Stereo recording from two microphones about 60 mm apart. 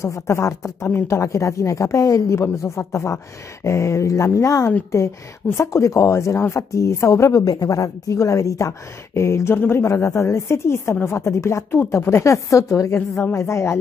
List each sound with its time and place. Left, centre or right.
0.0 s a woman's voice: left
2.4 s a woman's voice: left
4.9 s a woman's voice: left